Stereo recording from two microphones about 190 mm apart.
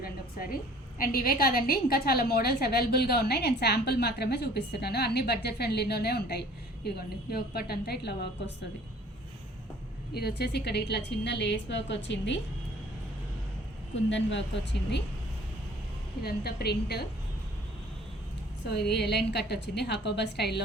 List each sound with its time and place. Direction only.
0.0 s a sound: 50° left (ahead or behind)
0.9 s a woman's voice: 50° left (ahead or behind)
10.2 s a woman's voice: 60° left (ahead or behind)
13.9 s speech: 75° left (ahead or behind)
16.2 s a woman's voice: 55° left (ahead or behind)
18.9 s a woman's voice: 60° left (ahead or behind)